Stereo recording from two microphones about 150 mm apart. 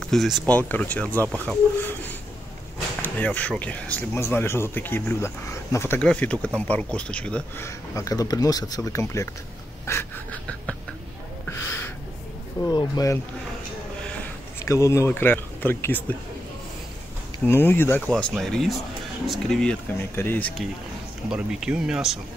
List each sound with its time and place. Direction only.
0.0 s speech: centre (ahead or behind)
11.5 s a sound: 15° left (ahead or behind)
12.6 s speech: 25° left (ahead or behind)
14.7 s speech: 20° left (ahead or behind)
17.5 s speech: 15° left (ahead or behind)
21.3 s speech: 5° right (ahead or behind)